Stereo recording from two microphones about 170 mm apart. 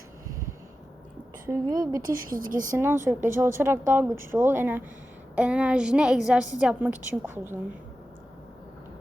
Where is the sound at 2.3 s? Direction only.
55° right (ahead or behind).